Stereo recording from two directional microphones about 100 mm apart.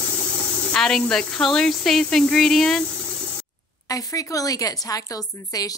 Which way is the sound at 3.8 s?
35° left (ahead or behind).